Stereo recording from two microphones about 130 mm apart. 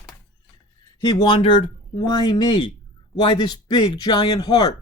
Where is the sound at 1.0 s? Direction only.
35° left (ahead or behind).